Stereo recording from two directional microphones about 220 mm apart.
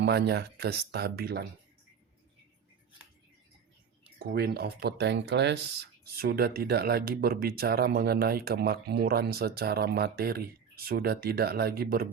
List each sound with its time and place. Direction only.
0.0 s speech: 50° right (ahead or behind)
4.2 s speech: 45° right (ahead or behind)